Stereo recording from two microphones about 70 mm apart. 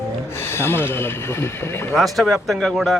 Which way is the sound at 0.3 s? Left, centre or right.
Left.